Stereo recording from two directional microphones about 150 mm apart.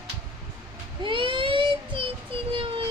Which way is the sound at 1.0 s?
35° right (ahead or behind).